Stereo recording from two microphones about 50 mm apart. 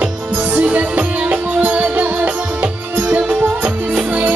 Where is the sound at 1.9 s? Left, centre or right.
Right.